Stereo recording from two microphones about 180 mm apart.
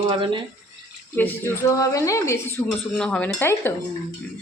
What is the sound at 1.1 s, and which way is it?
Speech, 10° left (ahead or behind).